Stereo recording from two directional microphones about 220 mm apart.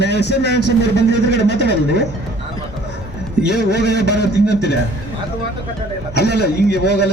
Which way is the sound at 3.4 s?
50° left (ahead or behind).